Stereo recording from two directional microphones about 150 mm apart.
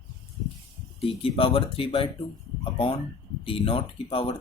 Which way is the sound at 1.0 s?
40° left (ahead or behind).